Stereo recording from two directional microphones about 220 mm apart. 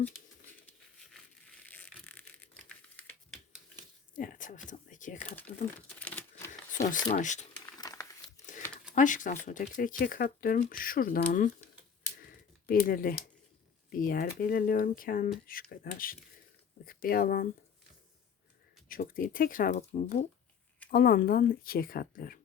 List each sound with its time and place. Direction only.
1.1 s crushing: 5° left (ahead or behind)
2.9 s typewriter: 5° left (ahead or behind)
4.1 s speech: 35° left (ahead or behind)
6.1 s typewriter: 5° left (ahead or behind)
6.5 s a sound: 35° left (ahead or behind)
7.1 s speech: 35° left (ahead or behind)
7.8 s crumpling: 15° left (ahead or behind)
9.0 s speech: 35° left (ahead or behind)
12.2 s typing: 40° left (ahead or behind)
13.9 s speech: 40° left (ahead or behind)
18.9 s speech: 40° left (ahead or behind)